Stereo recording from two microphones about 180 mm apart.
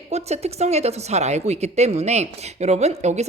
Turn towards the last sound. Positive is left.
turn(degrees=-40)  # may be behind; listen again after turning